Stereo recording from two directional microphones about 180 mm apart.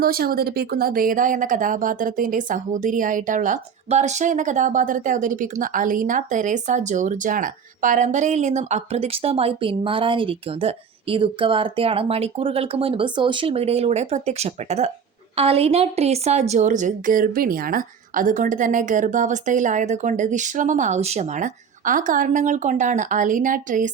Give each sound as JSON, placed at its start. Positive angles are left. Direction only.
{"t": 0.0, "sound": "a woman's voice", "side_deg": -55}